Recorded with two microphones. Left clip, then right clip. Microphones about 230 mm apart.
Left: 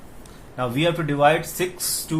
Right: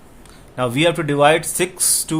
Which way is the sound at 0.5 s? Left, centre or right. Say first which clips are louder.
Right 5 dB; right.